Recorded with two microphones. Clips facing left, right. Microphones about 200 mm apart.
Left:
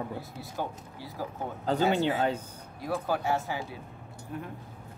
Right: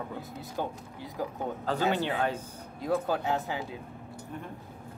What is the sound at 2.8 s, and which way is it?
Speech, 20° right (ahead or behind).